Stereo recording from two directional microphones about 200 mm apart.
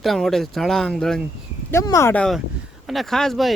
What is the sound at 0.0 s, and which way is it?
Speech, centre (ahead or behind).